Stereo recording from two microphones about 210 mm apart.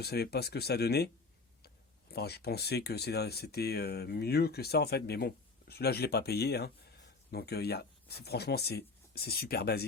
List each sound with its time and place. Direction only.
0.0 s speech: 50° left (ahead or behind)